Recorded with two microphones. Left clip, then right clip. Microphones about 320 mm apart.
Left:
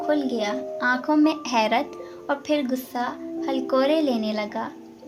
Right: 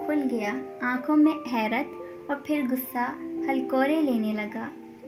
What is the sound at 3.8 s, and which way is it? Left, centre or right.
Speech, left.